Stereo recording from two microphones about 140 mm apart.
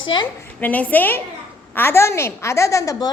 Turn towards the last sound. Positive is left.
turn(degrees=25)  # may be behind; listen again after turning